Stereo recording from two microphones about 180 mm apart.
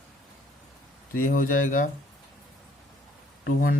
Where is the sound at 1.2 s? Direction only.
50° left (ahead or behind).